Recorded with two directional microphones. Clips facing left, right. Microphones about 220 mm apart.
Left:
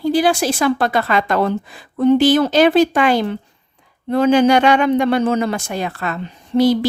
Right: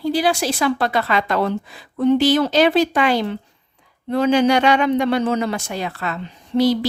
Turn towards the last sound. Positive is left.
turn(degrees=50)  # may be behind; listen again after turning